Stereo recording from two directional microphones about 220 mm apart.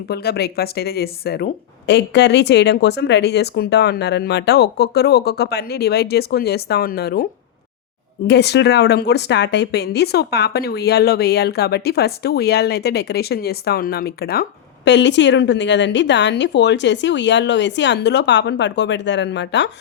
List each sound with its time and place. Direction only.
0.1 s speech: 45° left (ahead or behind)
8.3 s speech: 50° left (ahead or behind)